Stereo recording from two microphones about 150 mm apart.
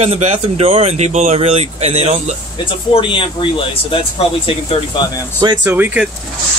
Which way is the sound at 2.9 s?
35° left (ahead or behind).